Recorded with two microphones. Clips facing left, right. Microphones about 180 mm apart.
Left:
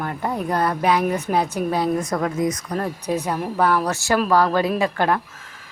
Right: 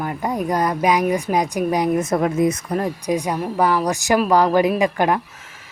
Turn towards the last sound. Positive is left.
turn(degrees=-15)  # may be behind; listen again after turning